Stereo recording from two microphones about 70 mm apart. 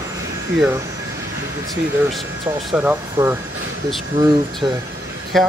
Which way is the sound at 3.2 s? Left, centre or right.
Right.